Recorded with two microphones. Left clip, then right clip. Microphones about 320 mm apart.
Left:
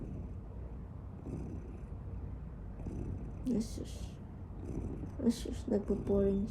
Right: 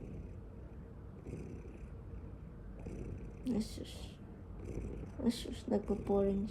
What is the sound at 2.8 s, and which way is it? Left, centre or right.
Purr, centre.